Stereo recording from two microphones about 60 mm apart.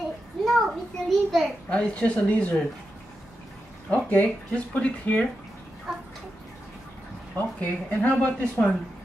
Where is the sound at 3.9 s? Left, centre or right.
Left.